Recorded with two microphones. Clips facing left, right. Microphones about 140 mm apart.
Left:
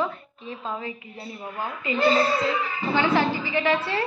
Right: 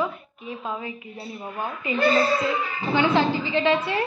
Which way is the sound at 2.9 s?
20° right (ahead or behind).